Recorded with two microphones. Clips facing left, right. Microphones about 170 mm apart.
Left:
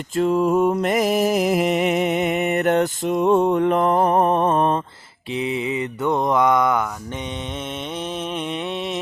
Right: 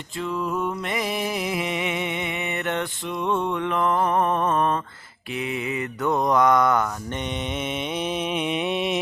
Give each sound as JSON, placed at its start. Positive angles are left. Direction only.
{"t": 0.2, "sound": "music", "side_deg": 45}
{"t": 5.3, "sound": "mantra", "side_deg": 25}
{"t": 7.9, "sound": "mantra", "side_deg": -10}